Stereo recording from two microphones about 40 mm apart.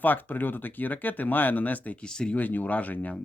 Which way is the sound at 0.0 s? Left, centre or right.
Left.